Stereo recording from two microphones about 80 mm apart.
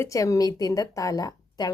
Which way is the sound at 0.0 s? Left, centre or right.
Left.